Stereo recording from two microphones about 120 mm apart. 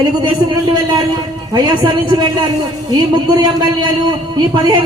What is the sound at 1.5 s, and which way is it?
A man's voice, 35° right (ahead or behind).